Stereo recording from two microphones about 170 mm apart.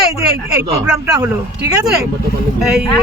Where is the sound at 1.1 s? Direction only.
20° right (ahead or behind).